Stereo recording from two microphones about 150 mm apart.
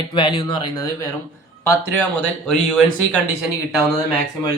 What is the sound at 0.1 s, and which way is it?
Speech, 30° left (ahead or behind).